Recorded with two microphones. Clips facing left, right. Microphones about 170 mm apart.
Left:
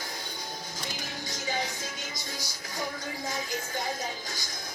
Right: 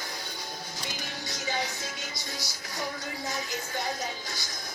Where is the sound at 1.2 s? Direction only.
45° left (ahead or behind).